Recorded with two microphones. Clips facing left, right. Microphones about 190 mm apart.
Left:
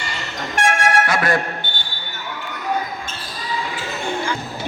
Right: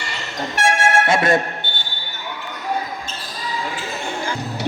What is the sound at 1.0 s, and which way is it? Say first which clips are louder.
Speech: right 3 dB; 25° right (ahead or behind).